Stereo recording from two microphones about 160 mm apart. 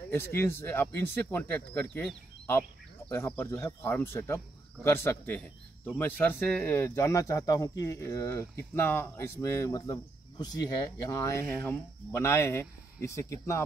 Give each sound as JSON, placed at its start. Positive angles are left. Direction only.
{"t": 0.1, "sound": "speech", "side_deg": 15}